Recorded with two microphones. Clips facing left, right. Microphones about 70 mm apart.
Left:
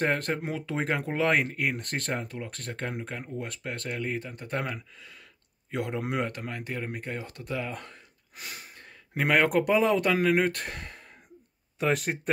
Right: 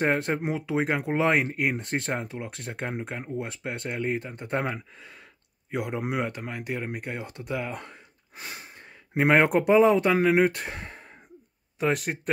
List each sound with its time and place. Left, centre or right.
0.0 s speech: centre
1.1 s speech: centre
4.7 s speech: right
5.7 s speech: centre
8.4 s speech: right; by 10.8 s centre
10.8 s gasp: right
11.8 s speech: centre